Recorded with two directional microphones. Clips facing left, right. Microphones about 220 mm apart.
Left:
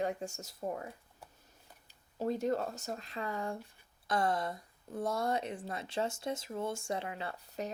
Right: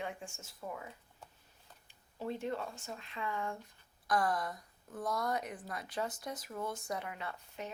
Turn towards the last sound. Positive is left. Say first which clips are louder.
# left 4 dB
turn(degrees=35)  # may be behind; listen again after turning